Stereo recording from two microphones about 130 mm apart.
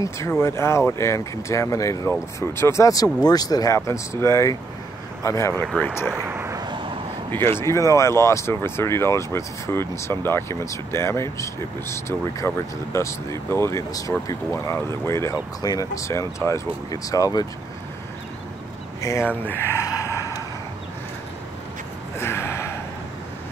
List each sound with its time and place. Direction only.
0.0 s speech: 20° left (ahead or behind)
6.1 s a sound: 20° right (ahead or behind)
6.6 s vehicle: 35° right (ahead or behind)
7.2 s speech: 15° left (ahead or behind)
18.9 s a sound: 20° left (ahead or behind)
22.2 s gasp: 20° left (ahead or behind)